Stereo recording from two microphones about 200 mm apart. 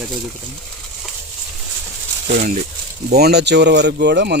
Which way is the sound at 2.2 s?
40° right (ahead or behind).